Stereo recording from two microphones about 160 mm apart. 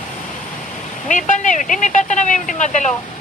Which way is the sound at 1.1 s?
50° left (ahead or behind).